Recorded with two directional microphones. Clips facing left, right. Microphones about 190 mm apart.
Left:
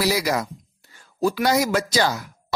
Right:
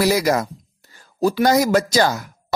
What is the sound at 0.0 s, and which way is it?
Speech, 50° right (ahead or behind).